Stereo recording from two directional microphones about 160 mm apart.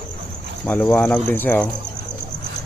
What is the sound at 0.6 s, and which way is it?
Speech, 10° left (ahead or behind).